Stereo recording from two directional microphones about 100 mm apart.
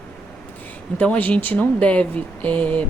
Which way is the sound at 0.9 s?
15° left (ahead or behind).